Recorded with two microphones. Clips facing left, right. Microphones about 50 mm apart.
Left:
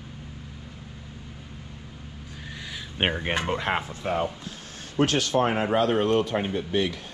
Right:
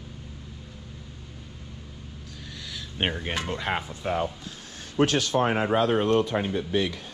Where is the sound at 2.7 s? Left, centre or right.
Left.